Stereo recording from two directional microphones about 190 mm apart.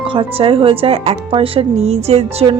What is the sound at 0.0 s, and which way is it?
A woman's voice, 25° right (ahead or behind).